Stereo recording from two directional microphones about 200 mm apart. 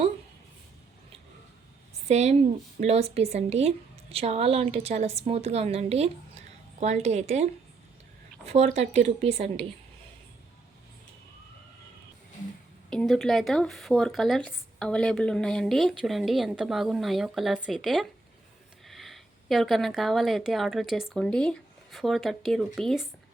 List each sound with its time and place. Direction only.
2.0 s a woman's voice: 35° right (ahead or behind)
8.4 s a woman's voice: 30° right (ahead or behind)
12.9 s a woman's voice: centre (ahead or behind)